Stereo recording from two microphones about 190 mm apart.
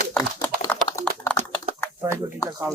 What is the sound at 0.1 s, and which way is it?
Typing, 10° left (ahead or behind).